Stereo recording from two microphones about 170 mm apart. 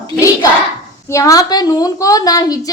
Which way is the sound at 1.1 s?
20° left (ahead or behind).